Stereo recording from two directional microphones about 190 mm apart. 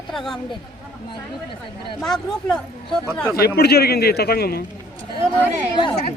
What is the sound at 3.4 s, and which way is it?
A man's voice, 55° left (ahead or behind).